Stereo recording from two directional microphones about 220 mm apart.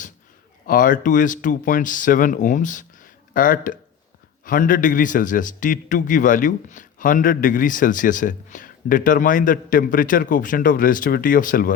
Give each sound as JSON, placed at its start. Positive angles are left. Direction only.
{"t": 0.7, "sound": "a man's voice", "side_deg": 40}